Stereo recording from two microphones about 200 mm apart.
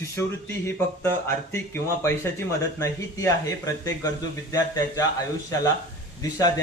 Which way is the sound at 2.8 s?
15° left (ahead or behind).